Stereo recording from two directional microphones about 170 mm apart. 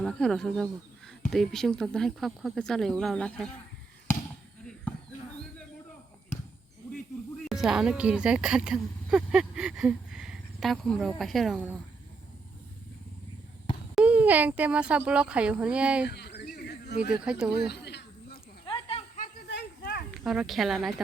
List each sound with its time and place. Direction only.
0.0 s speech: 5° left (ahead or behind)
7.4 s speech: centre (ahead or behind)
13.9 s a child's voice: 10° right (ahead or behind)
16.0 s a sound: 75° left (ahead or behind)
17.1 s speech: 5° right (ahead or behind)
17.5 s a sound: 75° left (ahead or behind)
18.6 s snake: 30° left (ahead or behind)
19.5 s a sound: 75° left (ahead or behind)
20.1 s speech: 5° right (ahead or behind)